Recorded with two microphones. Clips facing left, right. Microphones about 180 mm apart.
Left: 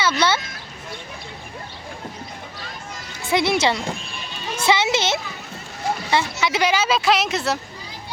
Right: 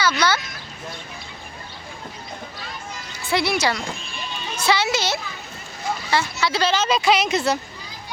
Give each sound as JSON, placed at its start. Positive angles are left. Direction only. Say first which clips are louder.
{"t": 0.0, "sound": "speech", "louder": "left 1 dB", "side_deg": 25}
{"t": 3.2, "sound": "a woman's voice", "louder": "left 2 dB", "side_deg": 20}